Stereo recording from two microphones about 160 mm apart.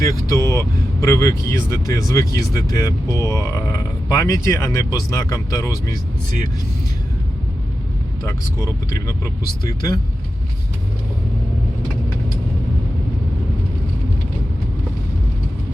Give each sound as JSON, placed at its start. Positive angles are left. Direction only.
{"t": 0.0, "sound": "speech", "side_deg": 20}
{"t": 8.9, "sound": "speech", "side_deg": 20}